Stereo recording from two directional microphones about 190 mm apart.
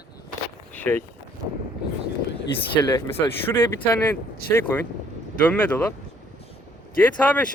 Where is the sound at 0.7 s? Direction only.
10° left (ahead or behind).